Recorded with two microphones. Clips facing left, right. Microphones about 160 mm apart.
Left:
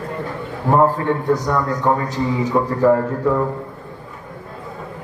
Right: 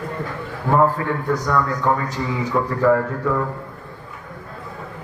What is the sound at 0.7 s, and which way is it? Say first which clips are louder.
A man's voice: left 2 dB; 20° left (ahead or behind).